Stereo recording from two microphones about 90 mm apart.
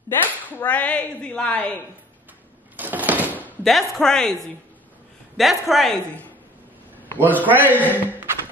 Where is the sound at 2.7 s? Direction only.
20° right (ahead or behind).